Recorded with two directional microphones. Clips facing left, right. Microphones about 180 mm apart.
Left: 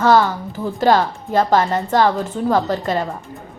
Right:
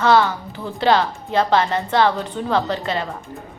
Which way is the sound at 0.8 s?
45° left (ahead or behind).